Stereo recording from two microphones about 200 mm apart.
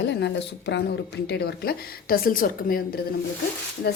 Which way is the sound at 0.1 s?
60° left (ahead or behind).